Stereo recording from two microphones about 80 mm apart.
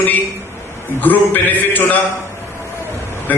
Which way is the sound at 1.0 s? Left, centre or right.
Left.